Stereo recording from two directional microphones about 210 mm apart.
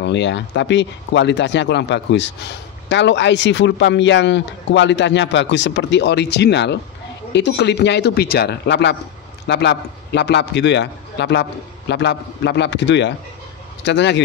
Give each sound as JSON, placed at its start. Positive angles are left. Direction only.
{"t": 0.0, "sound": "speech", "side_deg": 60}